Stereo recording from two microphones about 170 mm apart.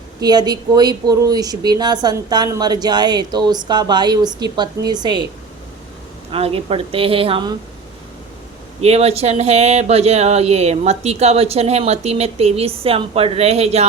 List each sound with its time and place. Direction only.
0.2 s speech: 25° right (ahead or behind)
6.3 s speech: 35° right (ahead or behind)
8.8 s speech: 40° right (ahead or behind)